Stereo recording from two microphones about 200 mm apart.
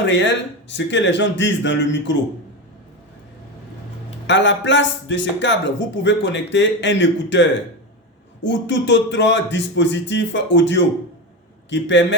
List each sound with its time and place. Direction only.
0.1 s a man's voice: 65° left (ahead or behind)
4.3 s a man's voice: 65° left (ahead or behind)